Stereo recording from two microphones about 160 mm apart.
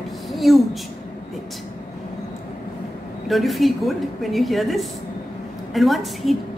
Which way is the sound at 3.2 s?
Centre (ahead or behind).